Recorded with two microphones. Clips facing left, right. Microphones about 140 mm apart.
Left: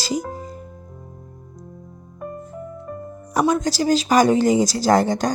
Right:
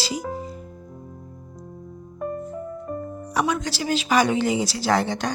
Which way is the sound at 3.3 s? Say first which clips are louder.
Left 6 dB; 45° left (ahead or behind).